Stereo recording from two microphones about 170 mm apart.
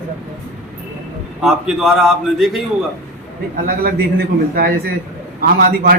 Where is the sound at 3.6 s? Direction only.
60° right (ahead or behind).